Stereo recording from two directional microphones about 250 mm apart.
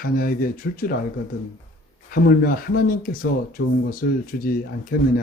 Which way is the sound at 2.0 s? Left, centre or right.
Left.